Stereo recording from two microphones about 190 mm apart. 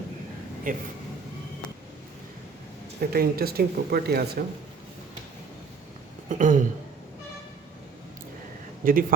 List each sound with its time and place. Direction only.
0.7 s speech: 45° right (ahead or behind)
3.0 s speech: 50° right (ahead or behind)
6.2 s speech: 40° right (ahead or behind)
8.8 s speech: 50° right (ahead or behind)